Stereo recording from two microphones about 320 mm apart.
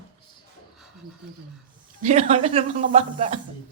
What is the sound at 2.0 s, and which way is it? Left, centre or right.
Speech, right.